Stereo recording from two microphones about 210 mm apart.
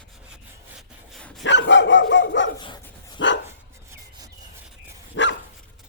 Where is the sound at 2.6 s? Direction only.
20° left (ahead or behind).